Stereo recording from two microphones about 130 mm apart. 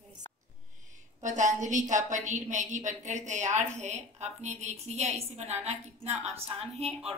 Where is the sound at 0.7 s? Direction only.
70° right (ahead or behind).